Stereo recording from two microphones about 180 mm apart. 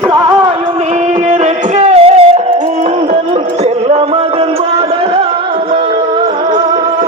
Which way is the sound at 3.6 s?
35° right (ahead or behind).